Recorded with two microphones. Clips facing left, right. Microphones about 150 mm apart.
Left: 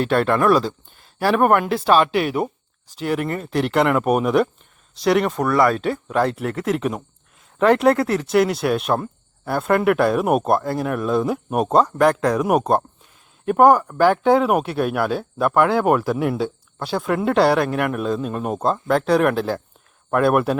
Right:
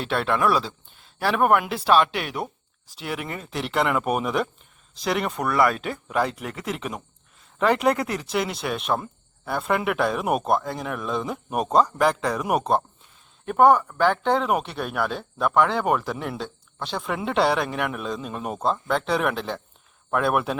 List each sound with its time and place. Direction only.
0.3 s speech: centre (ahead or behind)
5.5 s speech: 35° left (ahead or behind)
6.1 s speech: 5° right (ahead or behind)